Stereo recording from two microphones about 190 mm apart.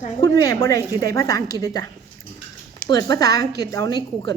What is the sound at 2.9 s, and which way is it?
A woman's voice, 20° left (ahead or behind).